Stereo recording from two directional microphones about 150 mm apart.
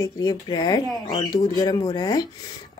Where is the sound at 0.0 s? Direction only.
25° left (ahead or behind).